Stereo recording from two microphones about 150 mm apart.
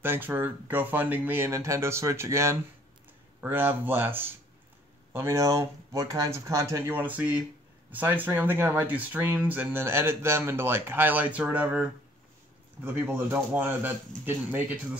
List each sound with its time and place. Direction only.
0.0 s speech: 15° right (ahead or behind)